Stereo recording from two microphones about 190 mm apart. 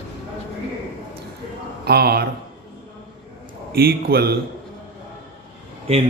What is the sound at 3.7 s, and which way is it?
Speech, 55° right (ahead or behind).